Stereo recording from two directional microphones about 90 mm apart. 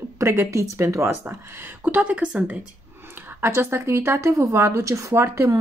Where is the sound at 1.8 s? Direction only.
20° right (ahead or behind).